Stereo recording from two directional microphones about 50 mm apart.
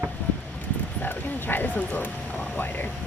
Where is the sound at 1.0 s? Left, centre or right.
Left.